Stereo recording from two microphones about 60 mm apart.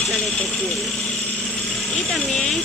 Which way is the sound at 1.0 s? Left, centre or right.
Centre.